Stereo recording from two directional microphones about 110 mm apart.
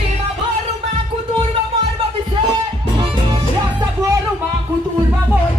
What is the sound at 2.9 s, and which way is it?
Music, 50° right (ahead or behind).